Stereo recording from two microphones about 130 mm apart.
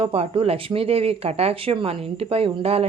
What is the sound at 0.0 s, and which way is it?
Speech, 45° right (ahead or behind).